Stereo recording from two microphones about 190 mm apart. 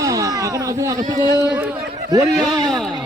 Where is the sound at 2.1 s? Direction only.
20° right (ahead or behind).